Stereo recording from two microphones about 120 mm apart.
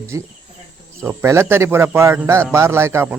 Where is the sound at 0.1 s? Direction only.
25° right (ahead or behind).